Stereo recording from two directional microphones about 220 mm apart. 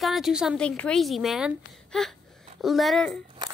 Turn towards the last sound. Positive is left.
turn(degrees=0)  # may be behind; listen again after turning